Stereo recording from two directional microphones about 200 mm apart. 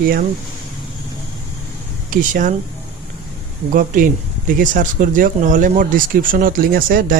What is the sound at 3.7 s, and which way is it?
Speech, 45° right (ahead or behind).